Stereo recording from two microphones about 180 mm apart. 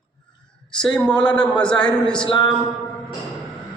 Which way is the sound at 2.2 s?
25° left (ahead or behind).